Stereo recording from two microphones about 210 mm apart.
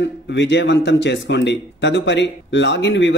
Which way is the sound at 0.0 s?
55° left (ahead or behind).